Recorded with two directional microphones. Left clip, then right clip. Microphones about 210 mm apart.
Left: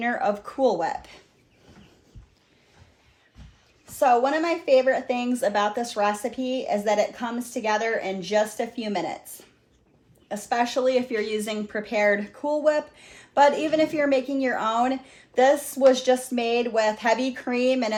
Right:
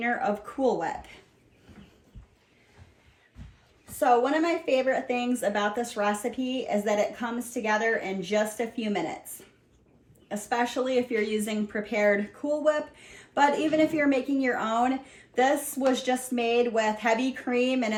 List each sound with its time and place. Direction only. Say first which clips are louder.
0.0 s speech: left 3 dB; 35° left (ahead or behind)
3.8 s speech: left 3 dB; 25° left (ahead or behind)
10.2 s speech: left 3 dB; 30° left (ahead or behind)